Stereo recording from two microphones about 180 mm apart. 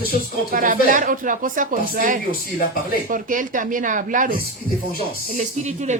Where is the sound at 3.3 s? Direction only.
45° right (ahead or behind).